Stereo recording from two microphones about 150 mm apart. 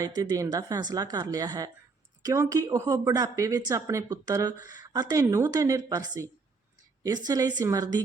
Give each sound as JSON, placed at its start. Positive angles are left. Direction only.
{"t": 0.0, "sound": "a woman's voice", "side_deg": -25}